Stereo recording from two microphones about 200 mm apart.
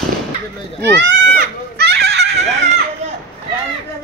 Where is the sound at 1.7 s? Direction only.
55° right (ahead or behind).